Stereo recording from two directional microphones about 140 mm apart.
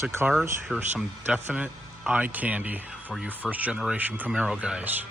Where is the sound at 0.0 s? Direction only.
15° right (ahead or behind).